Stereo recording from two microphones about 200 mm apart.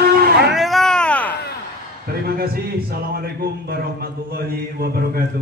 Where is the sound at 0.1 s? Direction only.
50° right (ahead or behind).